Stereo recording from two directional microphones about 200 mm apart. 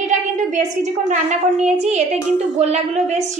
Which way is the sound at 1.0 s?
40° right (ahead or behind).